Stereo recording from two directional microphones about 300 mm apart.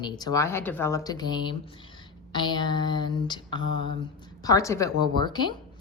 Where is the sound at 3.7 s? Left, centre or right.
Right.